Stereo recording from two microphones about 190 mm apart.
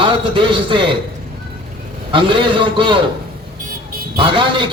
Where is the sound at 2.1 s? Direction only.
25° right (ahead or behind).